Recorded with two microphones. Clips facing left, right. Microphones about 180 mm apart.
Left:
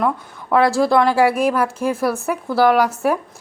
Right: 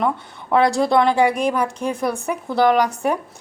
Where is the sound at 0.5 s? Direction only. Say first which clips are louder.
Left 1 dB; centre (ahead or behind).